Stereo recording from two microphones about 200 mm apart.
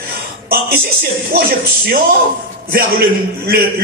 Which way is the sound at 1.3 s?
50° right (ahead or behind).